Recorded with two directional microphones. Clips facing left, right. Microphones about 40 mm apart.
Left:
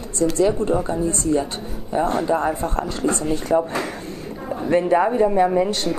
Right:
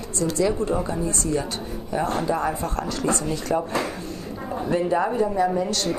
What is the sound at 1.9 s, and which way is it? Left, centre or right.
Speech, left.